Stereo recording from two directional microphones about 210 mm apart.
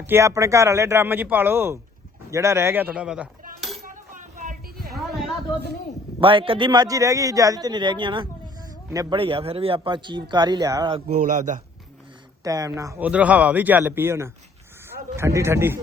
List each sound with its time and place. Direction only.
0.1 s a man's voice: 15° right (ahead or behind)
3.8 s a sound: 40° right (ahead or behind)
6.1 s a man's voice: 25° right (ahead or behind)
11.1 s a man's voice: 35° right (ahead or behind)
12.4 s a man's voice: 15° right (ahead or behind)